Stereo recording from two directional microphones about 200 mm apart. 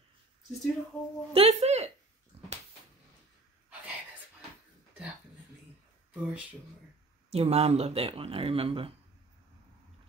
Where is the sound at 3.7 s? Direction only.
5° right (ahead or behind).